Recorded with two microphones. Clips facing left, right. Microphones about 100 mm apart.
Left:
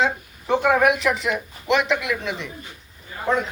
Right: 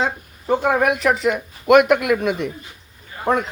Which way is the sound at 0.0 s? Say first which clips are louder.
Left 1 dB; 40° right (ahead or behind).